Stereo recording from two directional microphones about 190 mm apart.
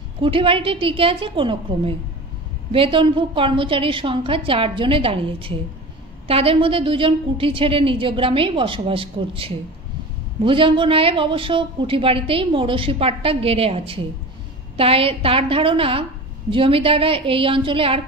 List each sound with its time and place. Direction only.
0.2 s speech: 30° right (ahead or behind)